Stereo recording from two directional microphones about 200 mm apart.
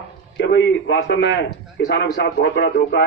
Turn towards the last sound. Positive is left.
turn(degrees=60)  # may be behind; listen again after turning